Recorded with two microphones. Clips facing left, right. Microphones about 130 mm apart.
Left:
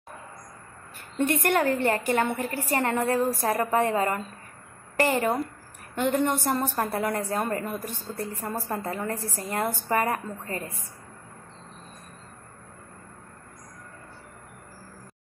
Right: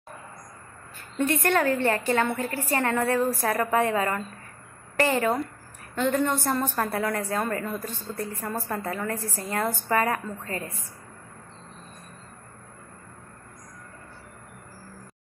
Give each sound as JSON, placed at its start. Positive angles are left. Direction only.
{"t": 1.2, "sound": "a woman's voice", "side_deg": 15}
{"t": 5.0, "sound": "a woman's voice", "side_deg": 15}